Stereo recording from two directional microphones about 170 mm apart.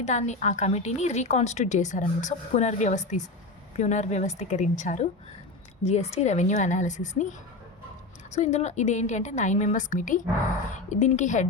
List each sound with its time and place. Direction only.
0.0 s a woman's voice: 45° left (ahead or behind)